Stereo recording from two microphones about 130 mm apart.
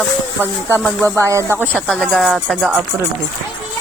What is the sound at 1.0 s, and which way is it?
Speech, 20° right (ahead or behind).